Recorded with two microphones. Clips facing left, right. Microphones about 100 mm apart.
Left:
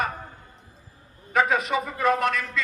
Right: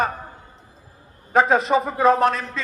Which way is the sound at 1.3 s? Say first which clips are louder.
Right 6 dB; 30° right (ahead or behind).